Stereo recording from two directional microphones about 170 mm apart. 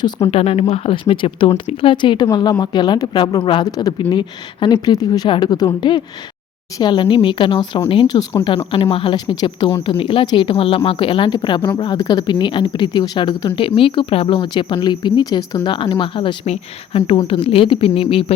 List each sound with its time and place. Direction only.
0.3 s a woman's voice: 35° left (ahead or behind)